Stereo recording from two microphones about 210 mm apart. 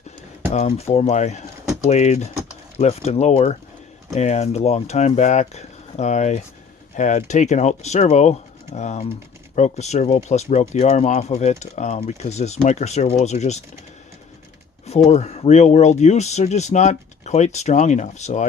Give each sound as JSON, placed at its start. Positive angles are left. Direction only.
{"t": 0.5, "sound": "speech", "side_deg": 30}
{"t": 14.8, "sound": "speech", "side_deg": 30}